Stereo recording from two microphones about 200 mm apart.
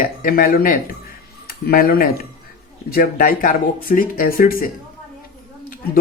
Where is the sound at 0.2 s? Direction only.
45° left (ahead or behind).